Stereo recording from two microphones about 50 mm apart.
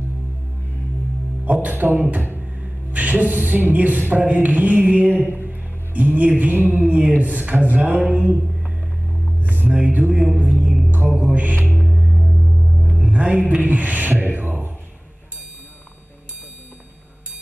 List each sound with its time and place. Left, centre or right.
1.4 s speech: right
5.5 s music: right
7.2 s speech: right
9.4 s music: right
11.9 s music: centre
13.1 s speech: right